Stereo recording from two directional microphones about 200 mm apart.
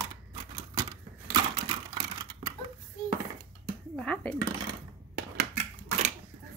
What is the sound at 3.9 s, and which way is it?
Dishes, 5° left (ahead or behind).